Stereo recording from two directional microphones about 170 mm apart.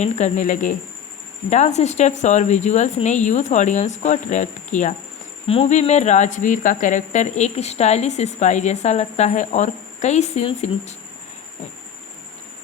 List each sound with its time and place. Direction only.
0.0 s speech: 45° left (ahead or behind)